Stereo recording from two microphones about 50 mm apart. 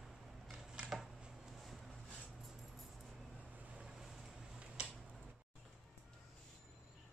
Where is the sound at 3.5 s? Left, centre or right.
Right.